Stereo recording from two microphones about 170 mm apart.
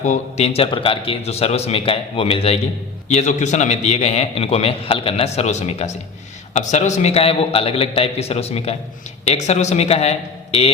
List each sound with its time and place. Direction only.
0.0 s a man's voice: 40° left (ahead or behind)